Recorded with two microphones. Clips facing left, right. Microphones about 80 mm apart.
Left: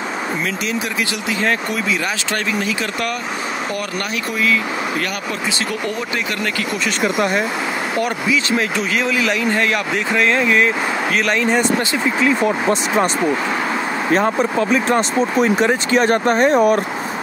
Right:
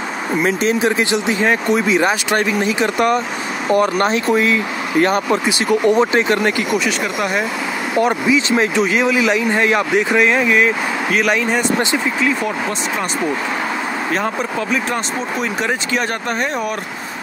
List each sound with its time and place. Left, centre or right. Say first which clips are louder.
0.4 s speech: right 6 dB; right
1.4 s speech: right 3 dB; centre
7.2 s speech: left 2 dB; centre
8.0 s speech: right 6 dB; right; by 11.6 s centre
12.4 s speech: left 3 dB; centre
14.4 s speech: left 3 dB; centre